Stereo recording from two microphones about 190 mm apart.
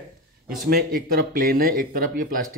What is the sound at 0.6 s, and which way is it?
Speech, 50° right (ahead or behind).